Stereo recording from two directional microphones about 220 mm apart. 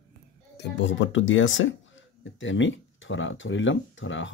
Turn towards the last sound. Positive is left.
turn(degrees=60)  # may be behind; listen again after turning